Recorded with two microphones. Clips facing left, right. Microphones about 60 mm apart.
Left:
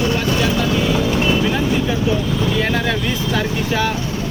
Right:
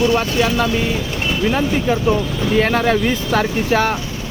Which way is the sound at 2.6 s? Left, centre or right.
Right.